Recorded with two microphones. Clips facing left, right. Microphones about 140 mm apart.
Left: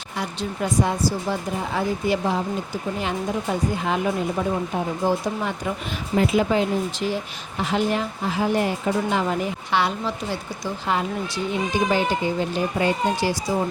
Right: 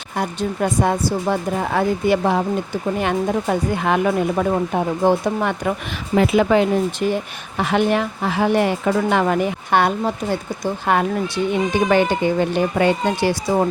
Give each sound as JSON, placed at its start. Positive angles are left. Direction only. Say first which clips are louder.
{"t": 0.2, "sound": "speech", "louder": "right 6 dB", "side_deg": -55}
{"t": 11.7, "sound": "speech", "louder": "right 4 dB", "side_deg": -65}